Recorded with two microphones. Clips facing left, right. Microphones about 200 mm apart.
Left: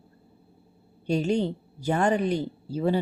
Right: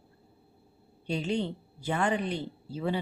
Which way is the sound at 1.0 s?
45° left (ahead or behind).